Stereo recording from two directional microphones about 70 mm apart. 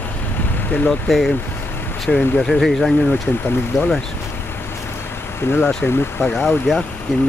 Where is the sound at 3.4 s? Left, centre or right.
Left.